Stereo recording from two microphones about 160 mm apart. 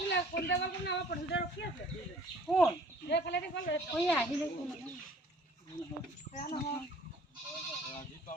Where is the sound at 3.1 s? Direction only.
90° left.